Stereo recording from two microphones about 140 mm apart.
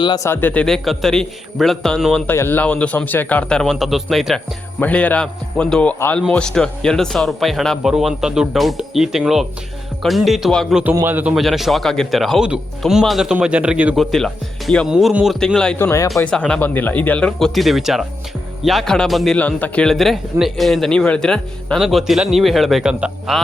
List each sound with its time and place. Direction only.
0.0 s speech: 30° left (ahead or behind)
0.3 s a man's voice: 15° left (ahead or behind)
2.2 s a man's voice: 15° left (ahead or behind); by 4.4 s centre (ahead or behind)
4.8 s a man's voice: 10° left (ahead or behind)
10.9 s a man's voice: 15° right (ahead or behind)
11.3 s a man's voice: centre (ahead or behind)
13.9 s a man's voice: centre (ahead or behind)
15.8 s speech: 20° left (ahead or behind)
16.1 s a man's voice: 5° left (ahead or behind)